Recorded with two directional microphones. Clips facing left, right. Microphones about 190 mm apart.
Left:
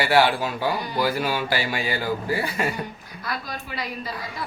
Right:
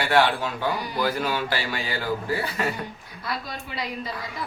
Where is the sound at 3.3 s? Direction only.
25° right (ahead or behind).